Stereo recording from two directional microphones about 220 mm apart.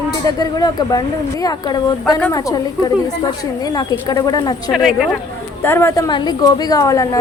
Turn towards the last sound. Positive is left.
turn(degrees=15)  # may be behind; listen again after turning